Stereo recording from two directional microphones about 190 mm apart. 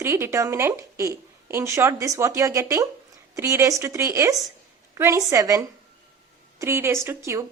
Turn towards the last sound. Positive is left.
turn(degrees=-15)  # may be behind; listen again after turning